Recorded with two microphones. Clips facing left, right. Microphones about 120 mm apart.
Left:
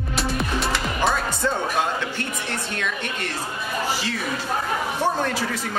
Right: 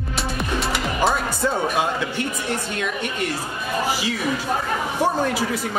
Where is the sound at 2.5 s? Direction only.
10° right (ahead or behind).